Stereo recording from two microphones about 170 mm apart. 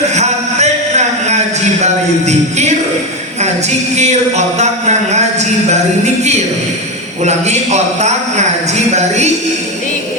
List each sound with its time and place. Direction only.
0.1 s a sound: 40° right (ahead or behind)
1.8 s jingle bell: 40° right (ahead or behind)
3.9 s speech: 40° right (ahead or behind)
7.3 s speech: 40° right (ahead or behind)